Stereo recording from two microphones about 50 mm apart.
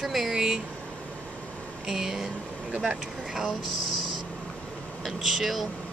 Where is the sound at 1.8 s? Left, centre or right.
Centre.